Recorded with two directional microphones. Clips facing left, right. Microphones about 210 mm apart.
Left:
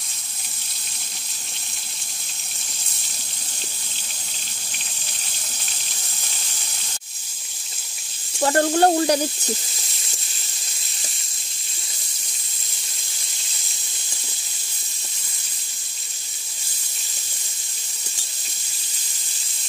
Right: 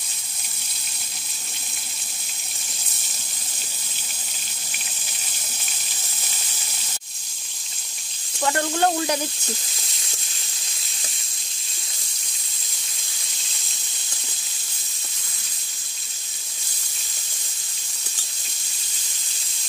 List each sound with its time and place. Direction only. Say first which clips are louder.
8.4 s sizzle: left 5 dB; 40° left (ahead or behind)